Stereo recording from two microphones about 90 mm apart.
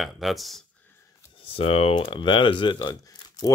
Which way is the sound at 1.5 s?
90° left.